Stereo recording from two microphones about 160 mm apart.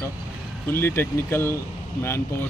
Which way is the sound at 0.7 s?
15° left (ahead or behind).